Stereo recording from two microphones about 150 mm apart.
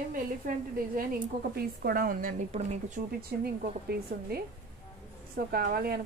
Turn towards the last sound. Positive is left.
turn(degrees=-85)